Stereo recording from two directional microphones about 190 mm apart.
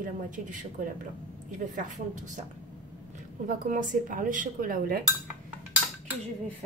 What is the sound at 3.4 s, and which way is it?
Speech, 45° right (ahead or behind).